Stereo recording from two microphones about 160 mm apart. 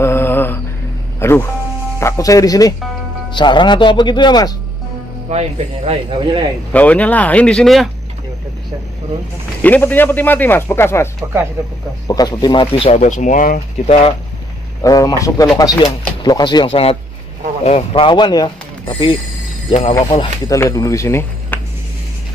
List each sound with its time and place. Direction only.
0.0 s mantra: 15° left (ahead or behind)
1.2 s speech: 15° left (ahead or behind)
5.3 s speech: 40° right (ahead or behind)
6.7 s speech: 10° left (ahead or behind)
9.6 s speech: 10° left (ahead or behind)
12.1 s speech: 25° left (ahead or behind); by 13.6 s 55° left (ahead or behind)
13.8 s speech: 35° left (ahead or behind)
14.8 s speech: 20° left (ahead or behind); by 20.0 s 40° left (ahead or behind)
20.4 s speech: 20° left (ahead or behind)